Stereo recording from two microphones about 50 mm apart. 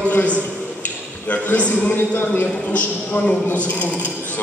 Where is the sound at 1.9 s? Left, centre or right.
Left.